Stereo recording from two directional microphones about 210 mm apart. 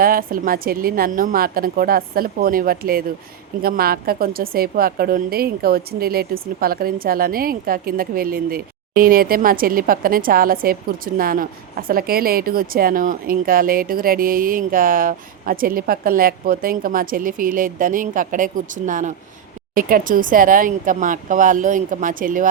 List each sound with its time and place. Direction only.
0.0 s a woman's voice: 45° right (ahead or behind)